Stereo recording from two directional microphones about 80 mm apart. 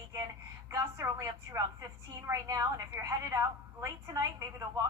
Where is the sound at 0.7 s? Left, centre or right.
Right.